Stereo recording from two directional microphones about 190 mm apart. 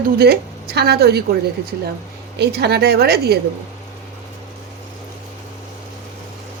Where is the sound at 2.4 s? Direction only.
60° right (ahead or behind).